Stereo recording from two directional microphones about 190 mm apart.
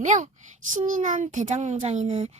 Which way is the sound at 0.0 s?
40° right (ahead or behind).